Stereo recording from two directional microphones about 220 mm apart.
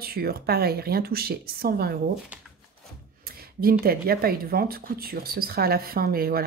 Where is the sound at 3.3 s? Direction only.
40° right (ahead or behind).